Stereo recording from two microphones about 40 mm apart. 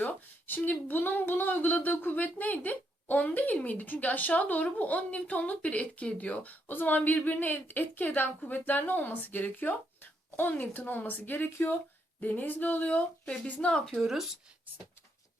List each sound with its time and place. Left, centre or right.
0.0 s speech: left
12.2 s speech: left
13.9 s speech: centre